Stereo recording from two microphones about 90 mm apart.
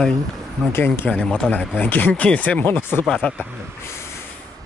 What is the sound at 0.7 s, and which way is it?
Speech, 25° left (ahead or behind).